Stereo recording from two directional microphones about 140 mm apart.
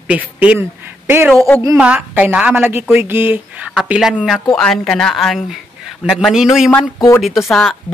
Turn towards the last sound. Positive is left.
turn(degrees=0)  # may be behind; listen again after turning